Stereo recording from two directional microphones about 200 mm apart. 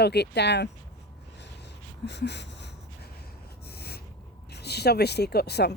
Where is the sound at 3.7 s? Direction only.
50° left (ahead or behind).